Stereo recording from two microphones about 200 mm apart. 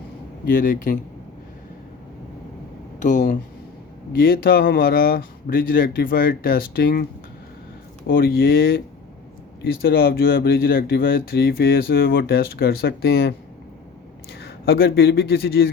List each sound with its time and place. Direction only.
0.4 s speech: 45° left (ahead or behind)
3.0 s speech: 40° left (ahead or behind)
14.3 s speech: 50° left (ahead or behind)